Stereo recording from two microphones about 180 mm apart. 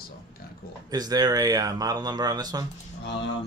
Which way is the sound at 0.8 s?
20° right (ahead or behind).